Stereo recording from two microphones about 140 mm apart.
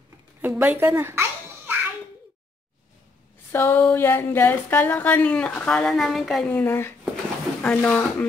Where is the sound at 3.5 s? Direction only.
15° left (ahead or behind); by 6.4 s centre (ahead or behind).